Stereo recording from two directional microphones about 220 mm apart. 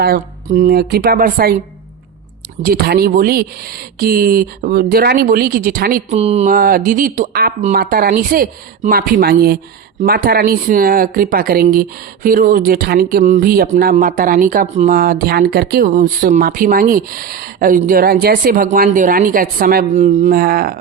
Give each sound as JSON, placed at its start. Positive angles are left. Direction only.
{"t": 0.0, "sound": "speech", "side_deg": -40}
{"t": 2.6, "sound": "speech", "side_deg": -45}
{"t": 6.1, "sound": "speech", "side_deg": -30}
{"t": 6.5, "sound": "speech", "side_deg": -40}